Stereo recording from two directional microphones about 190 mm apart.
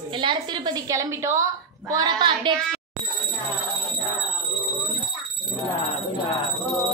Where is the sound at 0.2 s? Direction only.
25° right (ahead or behind).